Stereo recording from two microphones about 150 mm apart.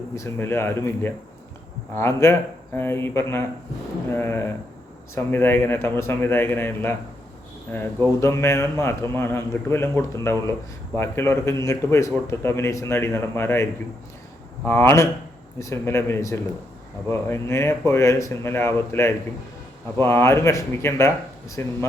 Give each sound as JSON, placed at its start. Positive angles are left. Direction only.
{"t": 0.2, "sound": "a man's voice", "side_deg": 15}
{"t": 8.2, "sound": "a man's voice", "side_deg": 20}